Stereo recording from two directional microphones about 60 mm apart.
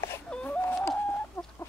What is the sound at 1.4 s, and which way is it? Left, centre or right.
Chicken, left.